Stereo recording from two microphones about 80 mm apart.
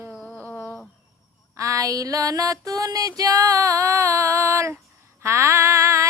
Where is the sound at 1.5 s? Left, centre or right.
Right.